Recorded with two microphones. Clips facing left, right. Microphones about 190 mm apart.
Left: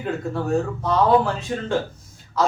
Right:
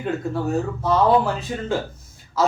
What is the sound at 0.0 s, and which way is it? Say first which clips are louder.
Speech: right 1 dB; 5° right (ahead or behind).